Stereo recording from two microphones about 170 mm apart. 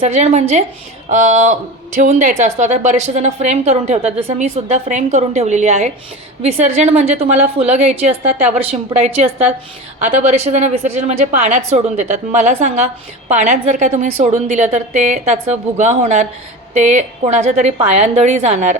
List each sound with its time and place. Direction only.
0.0 s a woman's voice: 40° right (ahead or behind)